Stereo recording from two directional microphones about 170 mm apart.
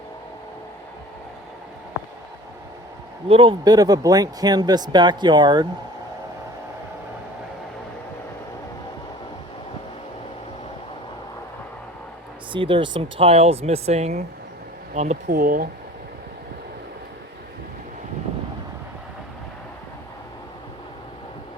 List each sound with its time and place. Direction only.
3.2 s speech: 30° right (ahead or behind)
12.5 s speech: 30° right (ahead or behind); by 15.7 s 55° right (ahead or behind)